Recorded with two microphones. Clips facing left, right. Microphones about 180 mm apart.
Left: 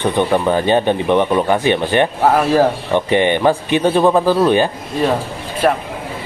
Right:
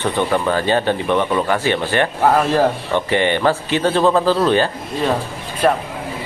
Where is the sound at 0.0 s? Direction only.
15° left (ahead or behind).